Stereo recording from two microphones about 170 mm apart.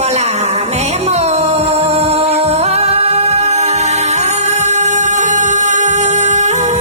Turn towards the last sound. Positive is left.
turn(degrees=-40)  # may be behind; listen again after turning